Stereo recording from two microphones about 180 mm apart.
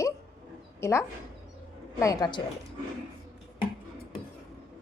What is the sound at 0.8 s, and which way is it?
A woman's voice, 15° left (ahead or behind).